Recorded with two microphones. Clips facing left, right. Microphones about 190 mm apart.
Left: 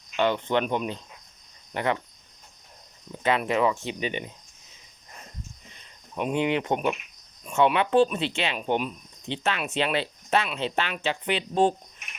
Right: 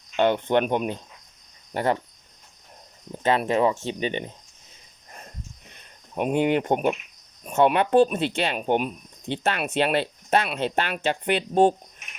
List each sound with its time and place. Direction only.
0.2 s speech: 50° right (ahead or behind)
1.7 s speech: 35° right (ahead or behind)
3.1 s speech: 35° right (ahead or behind)
5.7 s speech: 50° right (ahead or behind)